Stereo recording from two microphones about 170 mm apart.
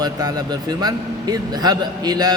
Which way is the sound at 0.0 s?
20° right (ahead or behind).